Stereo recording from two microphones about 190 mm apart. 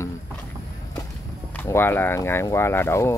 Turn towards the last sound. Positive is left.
turn(degrees=15)  # may be behind; listen again after turning